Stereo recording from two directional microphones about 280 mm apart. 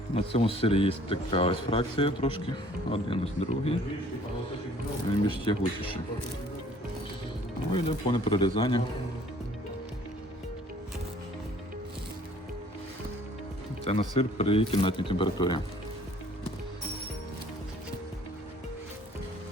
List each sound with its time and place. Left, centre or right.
0.1 s speech: left
5.2 s speech: centre
7.7 s speech: centre
13.8 s speech: left